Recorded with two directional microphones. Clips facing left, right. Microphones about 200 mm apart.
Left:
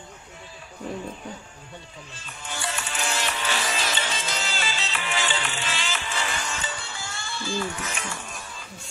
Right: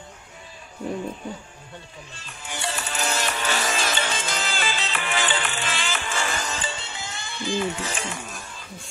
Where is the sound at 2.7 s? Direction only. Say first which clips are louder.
Right 3 dB; 40° right (ahead or behind); by 7.8 s 20° right (ahead or behind).